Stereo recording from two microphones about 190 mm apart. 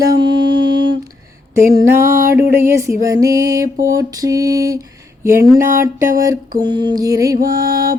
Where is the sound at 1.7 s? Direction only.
15° right (ahead or behind).